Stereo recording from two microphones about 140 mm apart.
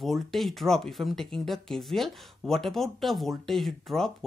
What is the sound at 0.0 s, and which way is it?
Speech, centre (ahead or behind).